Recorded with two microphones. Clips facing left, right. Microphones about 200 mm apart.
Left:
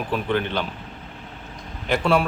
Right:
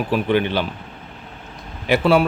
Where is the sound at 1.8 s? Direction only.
5° right (ahead or behind).